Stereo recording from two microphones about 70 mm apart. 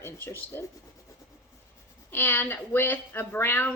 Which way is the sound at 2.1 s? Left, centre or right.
Left.